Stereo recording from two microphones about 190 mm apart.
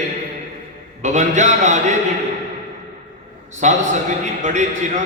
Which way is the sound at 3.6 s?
40° right (ahead or behind).